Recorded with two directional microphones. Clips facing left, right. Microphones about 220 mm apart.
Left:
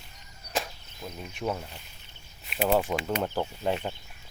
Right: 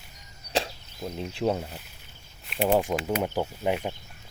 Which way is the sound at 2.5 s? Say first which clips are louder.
Right 2 dB; centre (ahead or behind).